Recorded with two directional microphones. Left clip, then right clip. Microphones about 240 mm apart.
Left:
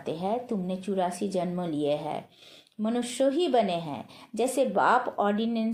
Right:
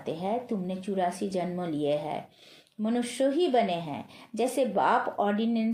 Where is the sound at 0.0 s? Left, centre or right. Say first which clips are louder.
Left 1 dB; left.